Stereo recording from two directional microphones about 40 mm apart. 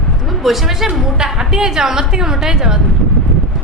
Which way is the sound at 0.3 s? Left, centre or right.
Centre.